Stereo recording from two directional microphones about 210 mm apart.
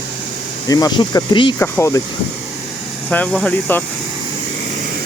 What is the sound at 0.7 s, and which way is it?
Speech, 20° left (ahead or behind).